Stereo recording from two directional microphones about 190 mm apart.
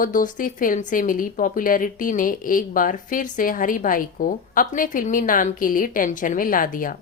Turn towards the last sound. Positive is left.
turn(degrees=45)  # may be behind; listen again after turning